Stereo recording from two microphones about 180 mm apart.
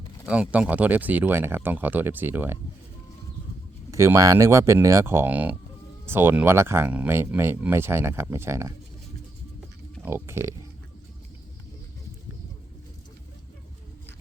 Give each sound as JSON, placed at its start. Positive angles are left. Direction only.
{"t": 0.3, "sound": "speech", "side_deg": -5}
{"t": 3.9, "sound": "speech", "side_deg": -15}
{"t": 10.0, "sound": "speech", "side_deg": -15}